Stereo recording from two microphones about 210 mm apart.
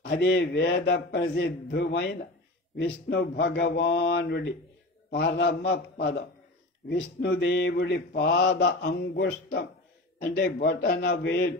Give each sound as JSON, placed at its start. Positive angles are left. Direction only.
{"t": 0.0, "sound": "a man's voice", "side_deg": 55}
{"t": 2.8, "sound": "mantra", "side_deg": 50}